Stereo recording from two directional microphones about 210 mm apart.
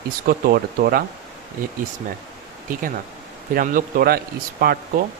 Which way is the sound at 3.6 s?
40° right (ahead or behind).